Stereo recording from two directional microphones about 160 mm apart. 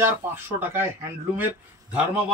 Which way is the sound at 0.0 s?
15° right (ahead or behind).